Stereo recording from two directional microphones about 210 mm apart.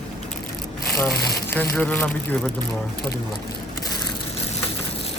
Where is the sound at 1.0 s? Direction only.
10° left (ahead or behind).